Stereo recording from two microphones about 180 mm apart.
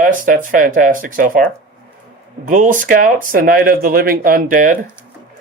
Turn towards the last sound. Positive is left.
turn(degrees=-50)  # may be behind; listen again after turning